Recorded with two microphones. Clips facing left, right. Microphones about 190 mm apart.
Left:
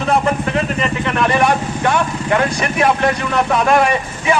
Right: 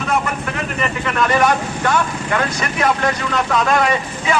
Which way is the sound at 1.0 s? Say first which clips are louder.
Even; 25° left (ahead or behind).